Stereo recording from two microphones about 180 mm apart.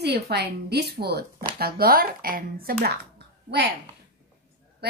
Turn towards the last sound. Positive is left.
turn(degrees=-65)  # may be behind; listen again after turning